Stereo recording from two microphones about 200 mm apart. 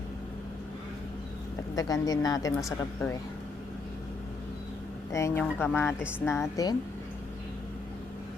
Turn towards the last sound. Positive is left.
turn(degrees=15)  # may be behind; listen again after turning